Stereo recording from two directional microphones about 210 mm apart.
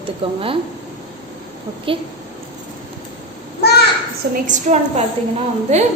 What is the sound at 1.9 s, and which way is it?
Speech, 25° right (ahead or behind).